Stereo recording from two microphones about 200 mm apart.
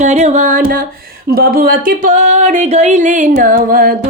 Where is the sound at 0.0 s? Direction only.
35° right (ahead or behind).